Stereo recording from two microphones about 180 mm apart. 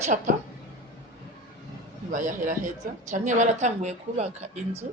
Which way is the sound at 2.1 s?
45° right (ahead or behind).